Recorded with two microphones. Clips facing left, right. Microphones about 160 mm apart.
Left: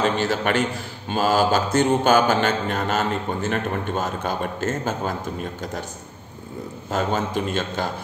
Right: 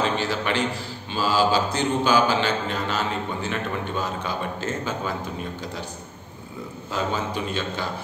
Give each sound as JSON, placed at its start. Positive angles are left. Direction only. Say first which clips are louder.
{"t": 0.0, "sound": "mantra", "louder": "left 3 dB", "side_deg": 50}
{"t": 6.9, "sound": "mantra", "louder": "left 3 dB", "side_deg": 50}